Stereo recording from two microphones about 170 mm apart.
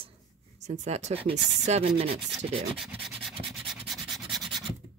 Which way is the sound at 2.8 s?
Centre (ahead or behind).